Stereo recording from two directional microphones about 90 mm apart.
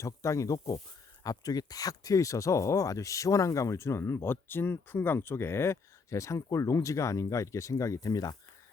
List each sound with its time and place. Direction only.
0.0 s speech: 35° left (ahead or behind)